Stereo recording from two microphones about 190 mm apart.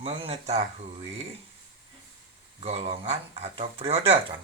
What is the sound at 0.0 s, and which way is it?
Speech, 30° right (ahead or behind).